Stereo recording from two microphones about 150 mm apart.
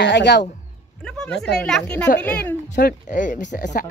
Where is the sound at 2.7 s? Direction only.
60° left (ahead or behind).